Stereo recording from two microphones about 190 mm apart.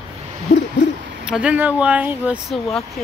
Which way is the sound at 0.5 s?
40° left (ahead or behind).